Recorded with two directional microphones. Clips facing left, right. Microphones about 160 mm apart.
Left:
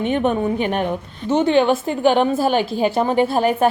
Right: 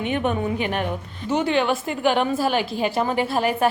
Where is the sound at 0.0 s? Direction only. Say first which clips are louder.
Left 4 dB; 35° left (ahead or behind).